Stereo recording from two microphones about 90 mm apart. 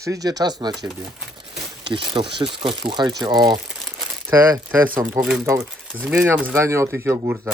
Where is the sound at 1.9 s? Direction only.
65° right (ahead or behind).